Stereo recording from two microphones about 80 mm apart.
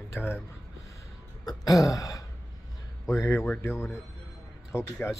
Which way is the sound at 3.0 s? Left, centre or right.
Left.